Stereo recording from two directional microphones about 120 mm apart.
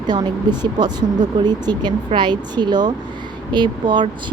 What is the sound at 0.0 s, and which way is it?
Speech, 35° right (ahead or behind).